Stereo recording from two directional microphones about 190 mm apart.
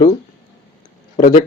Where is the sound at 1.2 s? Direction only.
45° left (ahead or behind).